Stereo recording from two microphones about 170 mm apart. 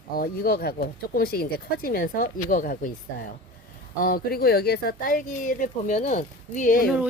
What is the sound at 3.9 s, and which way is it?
Speech, 60° left (ahead or behind).